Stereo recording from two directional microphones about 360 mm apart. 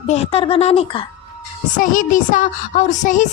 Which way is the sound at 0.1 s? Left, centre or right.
Centre.